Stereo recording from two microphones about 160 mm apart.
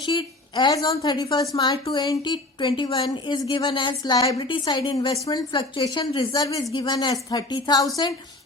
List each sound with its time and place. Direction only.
0.0 s a woman's voice: 30° left (ahead or behind)